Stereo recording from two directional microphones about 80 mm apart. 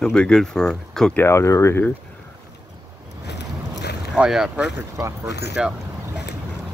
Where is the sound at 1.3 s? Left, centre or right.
Left.